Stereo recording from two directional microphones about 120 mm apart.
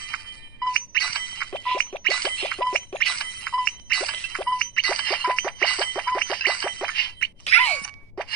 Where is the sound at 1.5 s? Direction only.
10° left (ahead or behind).